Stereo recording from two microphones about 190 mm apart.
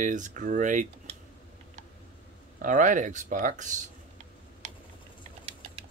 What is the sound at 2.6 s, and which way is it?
Speech, 40° right (ahead or behind).